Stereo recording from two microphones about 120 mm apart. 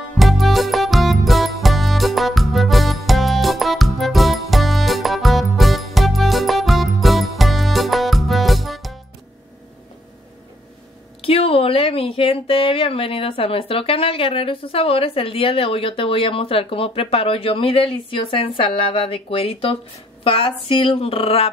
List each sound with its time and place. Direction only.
0.2 s music: centre (ahead or behind)
11.1 s speech: 50° left (ahead or behind)